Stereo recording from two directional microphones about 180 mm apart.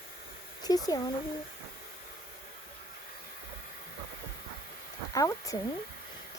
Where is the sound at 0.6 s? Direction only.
20° left (ahead or behind).